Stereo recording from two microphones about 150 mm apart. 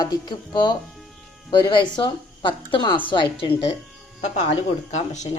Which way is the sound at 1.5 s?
30° left (ahead or behind).